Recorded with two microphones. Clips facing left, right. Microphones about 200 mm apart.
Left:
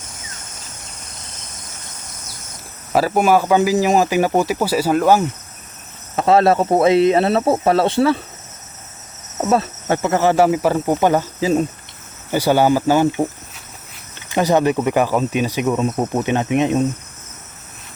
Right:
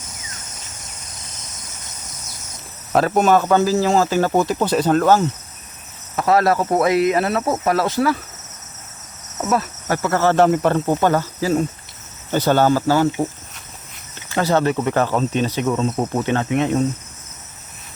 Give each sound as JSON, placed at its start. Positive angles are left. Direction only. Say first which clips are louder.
{"t": 2.9, "sound": "speech", "louder": "even", "side_deg": 5}
{"t": 6.1, "sound": "speech", "louder": "left 3 dB", "side_deg": 25}
{"t": 9.5, "sound": "speech", "louder": "left 3 dB", "side_deg": 25}
{"t": 14.3, "sound": "speech", "louder": "left 2 dB", "side_deg": 15}